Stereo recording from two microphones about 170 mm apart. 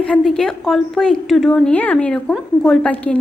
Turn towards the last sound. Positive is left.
turn(degrees=5)  # may be behind; listen again after turning